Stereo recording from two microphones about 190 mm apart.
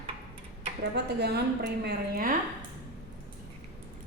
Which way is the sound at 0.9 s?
60° right (ahead or behind).